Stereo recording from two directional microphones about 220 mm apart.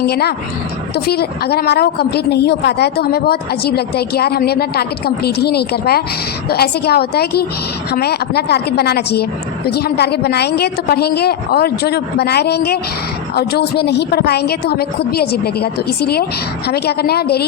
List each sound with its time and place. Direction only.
0.0 s a woman's voice: 45° left (ahead or behind)